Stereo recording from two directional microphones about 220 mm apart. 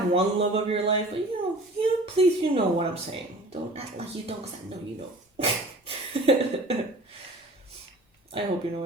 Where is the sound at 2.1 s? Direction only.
25° right (ahead or behind).